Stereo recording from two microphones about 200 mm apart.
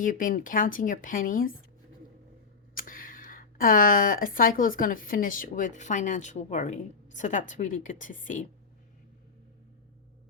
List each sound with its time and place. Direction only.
0.0 s speech: 40° left (ahead or behind)
2.7 s speech: 45° left (ahead or behind)